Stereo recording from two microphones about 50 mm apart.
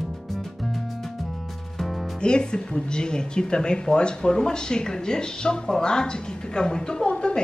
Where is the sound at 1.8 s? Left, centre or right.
Centre.